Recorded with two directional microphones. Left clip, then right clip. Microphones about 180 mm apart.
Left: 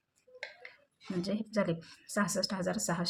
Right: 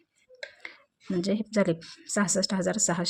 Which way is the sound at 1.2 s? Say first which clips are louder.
Right 7 dB; 40° right (ahead or behind).